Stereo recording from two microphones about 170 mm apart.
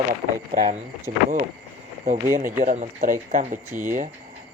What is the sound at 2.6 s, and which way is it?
Speech, 50° right (ahead or behind).